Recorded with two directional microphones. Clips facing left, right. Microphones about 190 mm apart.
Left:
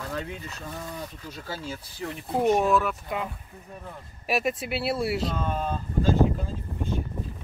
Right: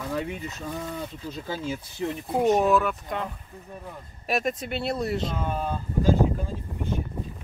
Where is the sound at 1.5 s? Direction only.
20° right (ahead or behind).